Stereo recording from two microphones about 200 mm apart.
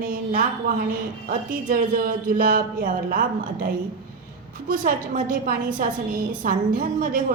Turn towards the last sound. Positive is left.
turn(degrees=-45)  # may be behind; listen again after turning